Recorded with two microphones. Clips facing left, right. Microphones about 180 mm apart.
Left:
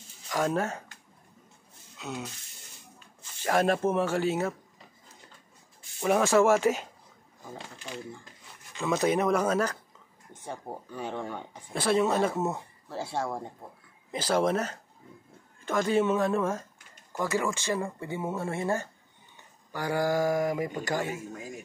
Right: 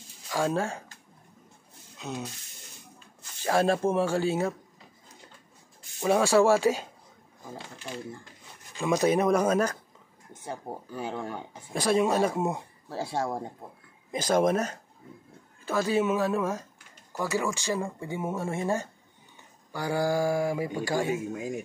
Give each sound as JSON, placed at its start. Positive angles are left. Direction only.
{"t": 0.3, "sound": "speech", "side_deg": -10}
{"t": 2.0, "sound": "rub", "side_deg": -15}
{"t": 3.4, "sound": "speech", "side_deg": -10}
{"t": 5.9, "sound": "speech", "side_deg": -10}
{"t": 8.7, "sound": "speech", "side_deg": -15}
{"t": 10.4, "sound": "speech", "side_deg": -5}